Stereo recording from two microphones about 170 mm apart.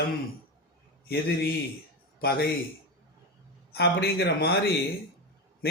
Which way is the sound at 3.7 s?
75° left (ahead or behind).